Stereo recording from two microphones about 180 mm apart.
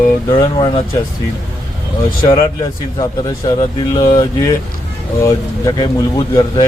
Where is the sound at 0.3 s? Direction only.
25° left (ahead or behind).